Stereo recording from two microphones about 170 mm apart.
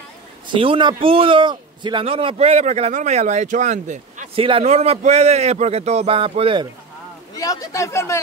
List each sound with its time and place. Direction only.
0.5 s a man's voice: 30° right (ahead or behind)
7.3 s speech: 20° left (ahead or behind)